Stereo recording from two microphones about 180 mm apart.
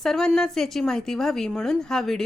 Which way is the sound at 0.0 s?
Centre (ahead or behind).